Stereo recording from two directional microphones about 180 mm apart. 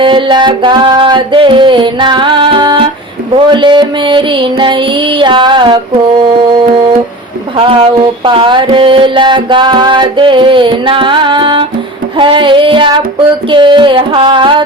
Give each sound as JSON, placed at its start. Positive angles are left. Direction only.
{"t": 0.0, "sound": "music", "side_deg": -25}
{"t": 7.6, "sound": "music", "side_deg": -30}